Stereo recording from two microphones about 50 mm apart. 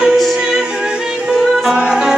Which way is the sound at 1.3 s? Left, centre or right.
Centre.